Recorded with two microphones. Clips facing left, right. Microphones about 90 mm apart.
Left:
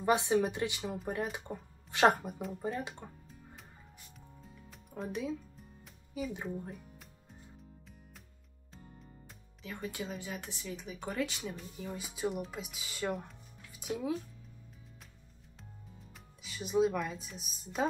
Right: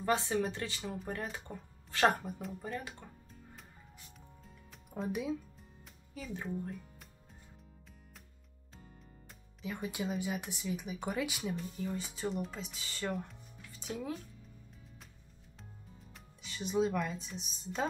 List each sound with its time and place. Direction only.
0.0 s speech: 15° left (ahead or behind)
4.6 s music: centre (ahead or behind)
6.1 s speech: 10° left (ahead or behind)
9.6 s speech: 15° right (ahead or behind); by 14.1 s 5° left (ahead or behind)
16.4 s speech: 5° left (ahead or behind)